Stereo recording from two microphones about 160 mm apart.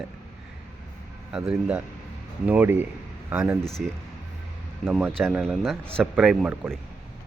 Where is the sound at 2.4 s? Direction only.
10° right (ahead or behind).